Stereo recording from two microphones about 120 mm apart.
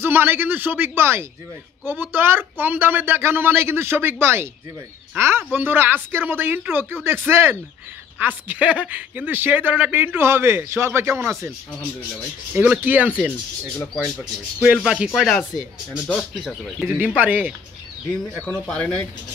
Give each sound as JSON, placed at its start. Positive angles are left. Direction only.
{"t": 0.0, "sound": "a man's voice", "side_deg": -20}
{"t": 12.5, "sound": "a man's voice", "side_deg": -15}
{"t": 15.0, "sound": "a man's voice", "side_deg": 0}